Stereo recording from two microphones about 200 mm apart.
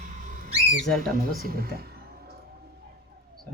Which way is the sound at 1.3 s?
50° right (ahead or behind).